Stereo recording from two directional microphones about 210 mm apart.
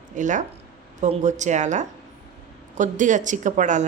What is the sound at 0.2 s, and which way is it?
Speech, 35° right (ahead or behind).